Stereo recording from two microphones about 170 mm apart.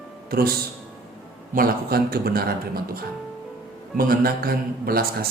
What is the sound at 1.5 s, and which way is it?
Speech, 60° right (ahead or behind).